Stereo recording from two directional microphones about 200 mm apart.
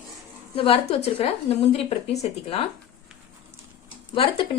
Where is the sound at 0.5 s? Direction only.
30° left (ahead or behind).